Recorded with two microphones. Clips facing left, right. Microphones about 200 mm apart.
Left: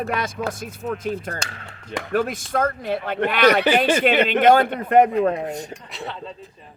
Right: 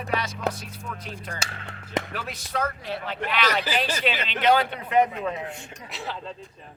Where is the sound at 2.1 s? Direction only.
50° left (ahead or behind).